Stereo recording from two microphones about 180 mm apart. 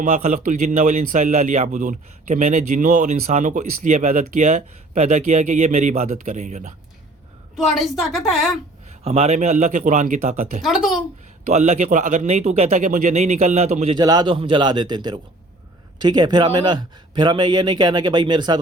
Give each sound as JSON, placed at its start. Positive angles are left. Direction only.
{"t": 0.0, "sound": "speech", "side_deg": -40}
{"t": 7.5, "sound": "a woman's voice", "side_deg": 0}
{"t": 8.9, "sound": "speech", "side_deg": -35}
{"t": 10.6, "sound": "a woman's voice", "side_deg": 0}
{"t": 11.4, "sound": "speech", "side_deg": -40}
{"t": 13.9, "sound": "speech", "side_deg": -20}